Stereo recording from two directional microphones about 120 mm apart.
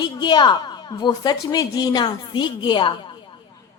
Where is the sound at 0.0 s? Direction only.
40° left (ahead or behind).